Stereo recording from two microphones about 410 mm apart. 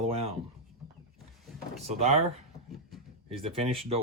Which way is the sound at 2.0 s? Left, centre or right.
Centre.